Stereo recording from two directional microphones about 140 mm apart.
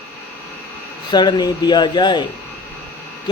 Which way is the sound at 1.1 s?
30° left (ahead or behind).